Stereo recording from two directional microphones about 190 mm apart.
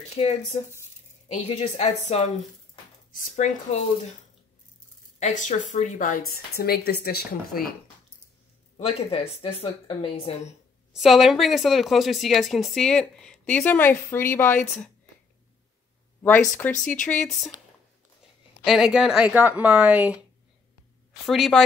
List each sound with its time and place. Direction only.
0.1 s speech: 30° left (ahead or behind)
3.3 s speech: 35° left (ahead or behind)
5.2 s a woman's voice: 40° left (ahead or behind); by 7.6 s 55° left (ahead or behind)
8.7 s speech: 30° left (ahead or behind)
10.9 s a woman's voice: centre (ahead or behind)
16.6 s a woman's voice: 10° left (ahead or behind)
18.6 s speech: 5° right (ahead or behind)
21.3 s a woman's voice: centre (ahead or behind)